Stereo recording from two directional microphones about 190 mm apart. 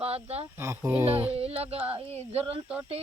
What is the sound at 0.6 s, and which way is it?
Speech, 15° right (ahead or behind).